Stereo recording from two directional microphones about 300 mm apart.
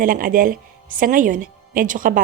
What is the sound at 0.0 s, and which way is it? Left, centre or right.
A woman's voice, right.